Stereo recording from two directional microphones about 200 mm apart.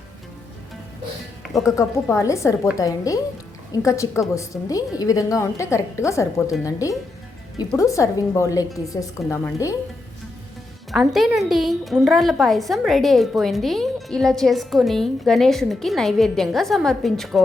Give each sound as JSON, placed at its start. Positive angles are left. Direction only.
{"t": 1.6, "sound": "a woman's voice", "side_deg": 15}
{"t": 10.9, "sound": "a woman's voice", "side_deg": 0}